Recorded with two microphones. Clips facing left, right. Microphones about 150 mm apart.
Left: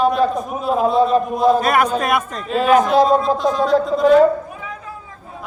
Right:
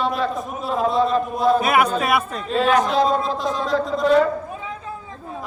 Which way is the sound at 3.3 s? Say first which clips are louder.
Left 7 dB; 45° left (ahead or behind).